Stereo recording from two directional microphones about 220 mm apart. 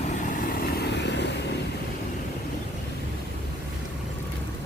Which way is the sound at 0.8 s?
50° left (ahead or behind).